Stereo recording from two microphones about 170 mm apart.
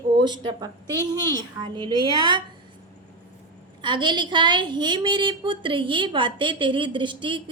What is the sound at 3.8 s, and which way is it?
A woman's voice, 25° right (ahead or behind).